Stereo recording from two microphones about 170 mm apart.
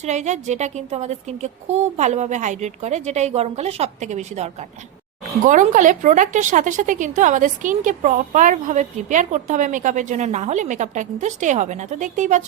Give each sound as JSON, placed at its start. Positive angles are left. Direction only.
{"t": 0.0, "sound": "a woman's voice", "side_deg": -45}
{"t": 5.5, "sound": "a woman's voice", "side_deg": -50}